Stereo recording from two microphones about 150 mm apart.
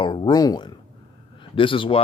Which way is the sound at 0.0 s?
30° left (ahead or behind).